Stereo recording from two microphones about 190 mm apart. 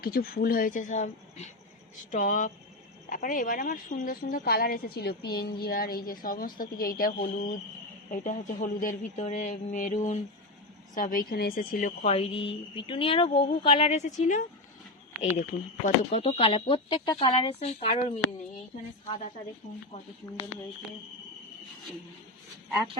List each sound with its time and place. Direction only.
0.0 s a woman's voice: 50° left (ahead or behind)
15.8 s speech: 35° left (ahead or behind)
19.9 s speech: 30° left (ahead or behind)